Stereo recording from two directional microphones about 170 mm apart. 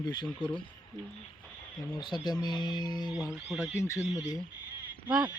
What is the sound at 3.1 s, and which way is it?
Speech, 5° right (ahead or behind).